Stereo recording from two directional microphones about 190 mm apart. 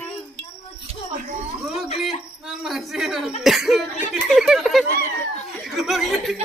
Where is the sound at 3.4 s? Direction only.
Centre (ahead or behind).